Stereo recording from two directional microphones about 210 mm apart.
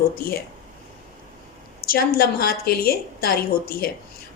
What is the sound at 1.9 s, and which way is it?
A woman's voice, 45° left (ahead or behind).